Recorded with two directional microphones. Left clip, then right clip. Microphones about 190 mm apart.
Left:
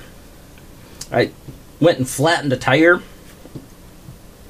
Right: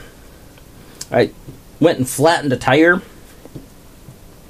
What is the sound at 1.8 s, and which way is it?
Speech, 40° right (ahead or behind).